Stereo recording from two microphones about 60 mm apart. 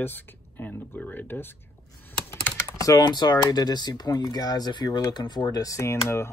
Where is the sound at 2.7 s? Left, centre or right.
Left.